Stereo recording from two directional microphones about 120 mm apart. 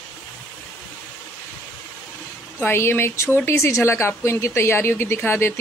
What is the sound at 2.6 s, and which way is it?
Speech, 20° left (ahead or behind).